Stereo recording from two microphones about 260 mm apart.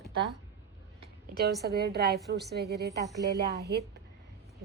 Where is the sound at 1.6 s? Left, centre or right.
Right.